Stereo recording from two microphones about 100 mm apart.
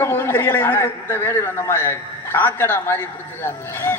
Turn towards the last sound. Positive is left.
turn(degrees=20)  # may be behind; listen again after turning